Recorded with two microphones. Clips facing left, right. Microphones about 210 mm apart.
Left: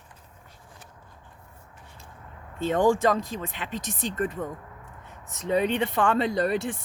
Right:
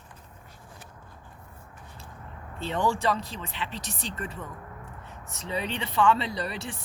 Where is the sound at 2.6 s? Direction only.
50° left (ahead or behind).